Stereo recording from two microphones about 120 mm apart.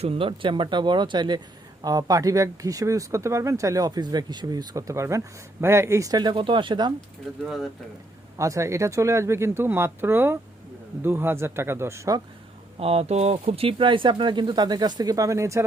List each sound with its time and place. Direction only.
0.0 s speech: 50° right (ahead or behind)
7.4 s speech: centre (ahead or behind)
8.4 s speech: 25° right (ahead or behind)
12.8 s speech: 55° right (ahead or behind); by 15.6 s 25° right (ahead or behind)